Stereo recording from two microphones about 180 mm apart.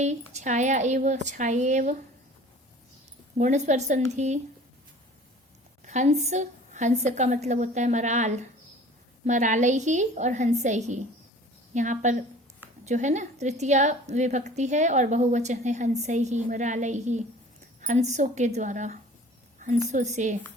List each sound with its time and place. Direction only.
0.0 s a woman's voice: 40° right (ahead or behind)
3.3 s a woman's voice: 40° right (ahead or behind)
5.8 s a woman's voice: 40° right (ahead or behind)
19.5 s a sound: 45° right (ahead or behind)
19.9 s a woman's voice: 40° right (ahead or behind)